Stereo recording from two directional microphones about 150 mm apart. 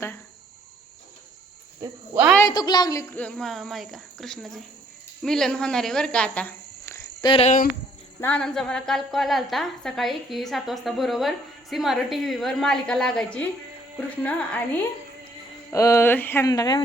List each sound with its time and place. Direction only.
1.8 s a sound: 15° right (ahead or behind)
2.5 s a woman's voice: 25° left (ahead or behind)
3.2 s a woman's voice: 5° left (ahead or behind)
6.8 s cricket: 20° left (ahead or behind)
7.3 s speech: 40° left (ahead or behind)
8.2 s a woman's voice: 5° left (ahead or behind)
15.7 s speech: 20° left (ahead or behind)
16.5 s a woman's voice: 25° left (ahead or behind)